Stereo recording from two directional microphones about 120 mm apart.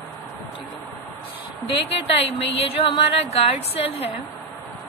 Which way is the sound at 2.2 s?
55° left (ahead or behind).